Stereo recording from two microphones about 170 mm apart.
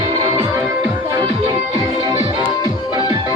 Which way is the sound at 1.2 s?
30° right (ahead or behind).